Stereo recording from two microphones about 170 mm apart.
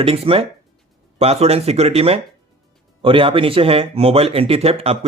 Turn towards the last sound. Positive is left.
turn(degrees=-35)  # may be behind; listen again after turning